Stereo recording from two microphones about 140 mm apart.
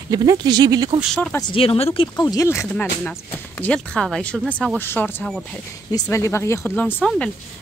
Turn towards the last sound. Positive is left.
turn(degrees=5)  # may be behind; listen again after turning